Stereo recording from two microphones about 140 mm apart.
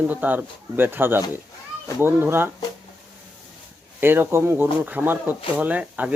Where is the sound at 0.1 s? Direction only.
10° right (ahead or behind).